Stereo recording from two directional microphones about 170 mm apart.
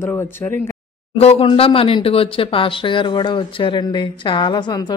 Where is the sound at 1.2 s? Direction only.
35° left (ahead or behind).